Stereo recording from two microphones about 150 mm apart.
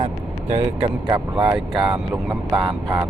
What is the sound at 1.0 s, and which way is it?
Speech, 30° right (ahead or behind).